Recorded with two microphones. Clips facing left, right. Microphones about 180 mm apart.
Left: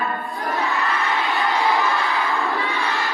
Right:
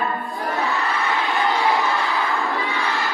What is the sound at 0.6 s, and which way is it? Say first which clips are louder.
Crowd: even; centre (ahead or behind).